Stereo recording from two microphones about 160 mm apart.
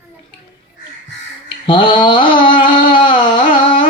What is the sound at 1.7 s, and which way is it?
Speech, 30° left (ahead or behind).